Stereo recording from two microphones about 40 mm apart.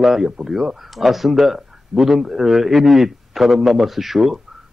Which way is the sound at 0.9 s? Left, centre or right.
Centre.